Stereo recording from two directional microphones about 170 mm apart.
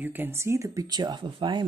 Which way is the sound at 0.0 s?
10° right (ahead or behind).